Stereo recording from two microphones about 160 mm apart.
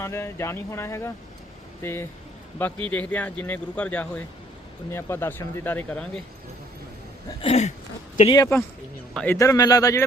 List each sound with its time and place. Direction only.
0.0 s speech: 15° left (ahead or behind)
7.4 s a sound: 40° left (ahead or behind)
8.3 s speech: 20° left (ahead or behind)